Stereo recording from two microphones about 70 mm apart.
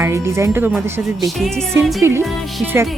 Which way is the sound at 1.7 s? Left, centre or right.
Right.